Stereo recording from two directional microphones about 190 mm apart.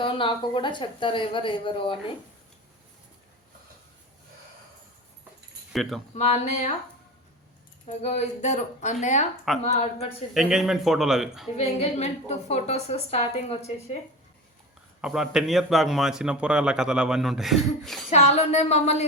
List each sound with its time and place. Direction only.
0.0 s speech: 25° left (ahead or behind)
5.7 s speech: centre (ahead or behind)
6.1 s a woman's voice: 35° left (ahead or behind)
7.9 s a woman's voice: 35° left (ahead or behind)
10.3 s a man's voice: centre (ahead or behind)
11.5 s a woman's voice: 35° left (ahead or behind)
15.0 s a man's voice: 5° right (ahead or behind)
18.1 s a woman's voice: 35° left (ahead or behind)